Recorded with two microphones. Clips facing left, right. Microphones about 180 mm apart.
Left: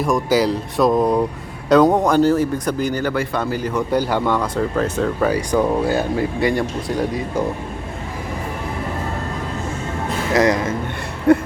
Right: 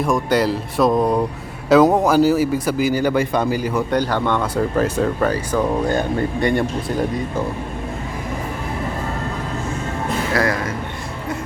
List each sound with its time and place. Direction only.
0.0 s a man's voice: centre (ahead or behind)
3.9 s speech: 10° left (ahead or behind)
4.5 s a man's voice: 10° right (ahead or behind)
5.3 s speech: 10° left (ahead or behind)
10.3 s speech: 20° left (ahead or behind)
11.3 s a sound: 65° left (ahead or behind)